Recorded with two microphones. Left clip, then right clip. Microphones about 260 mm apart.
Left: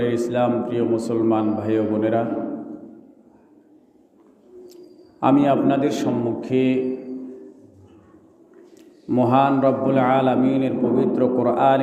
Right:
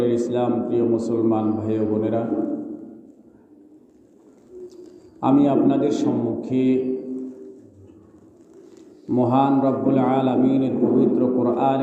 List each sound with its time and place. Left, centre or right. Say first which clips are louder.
0.0 s a man's voice: left 1 dB; left
5.2 s a man's voice: left 1 dB; left
9.0 s a man's voice: left 2 dB; left